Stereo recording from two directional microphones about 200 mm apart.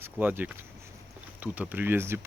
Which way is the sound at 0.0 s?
10° right (ahead or behind).